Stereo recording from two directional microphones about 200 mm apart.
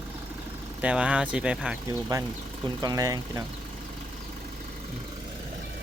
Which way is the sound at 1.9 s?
15° right (ahead or behind).